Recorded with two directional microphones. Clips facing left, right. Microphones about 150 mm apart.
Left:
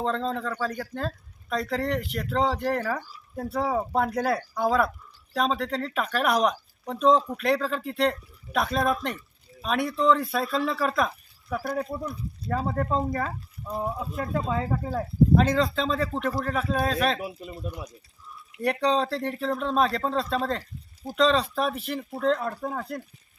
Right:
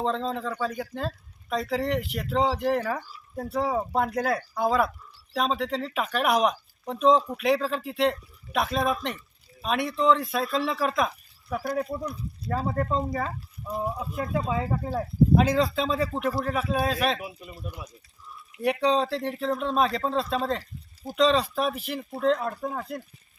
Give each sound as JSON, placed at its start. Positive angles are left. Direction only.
{"t": 0.0, "sound": "speech", "side_deg": 0}
{"t": 17.2, "sound": "speech", "side_deg": 25}
{"t": 18.5, "sound": "speech", "side_deg": 0}